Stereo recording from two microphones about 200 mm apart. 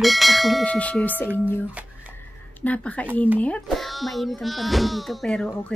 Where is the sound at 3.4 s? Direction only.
5° left (ahead or behind).